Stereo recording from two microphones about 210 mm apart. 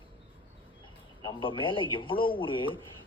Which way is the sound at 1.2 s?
25° left (ahead or behind).